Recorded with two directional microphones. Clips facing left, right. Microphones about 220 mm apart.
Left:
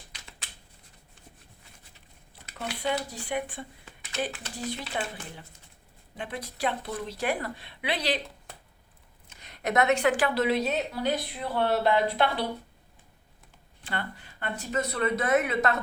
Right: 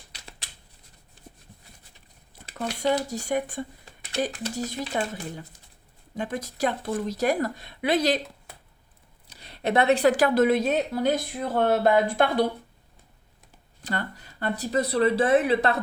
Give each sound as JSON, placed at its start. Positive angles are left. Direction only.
{"t": 0.1, "sound": "a sound", "side_deg": -35}
{"t": 2.6, "sound": "a woman's voice", "side_deg": -40}
{"t": 9.2, "sound": "a woman's voice", "side_deg": -35}
{"t": 13.8, "sound": "speech", "side_deg": -40}